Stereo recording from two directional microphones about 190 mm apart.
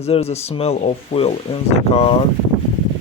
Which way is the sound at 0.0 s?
35° left (ahead or behind).